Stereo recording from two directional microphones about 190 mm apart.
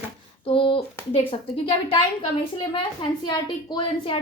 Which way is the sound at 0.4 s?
25° left (ahead or behind).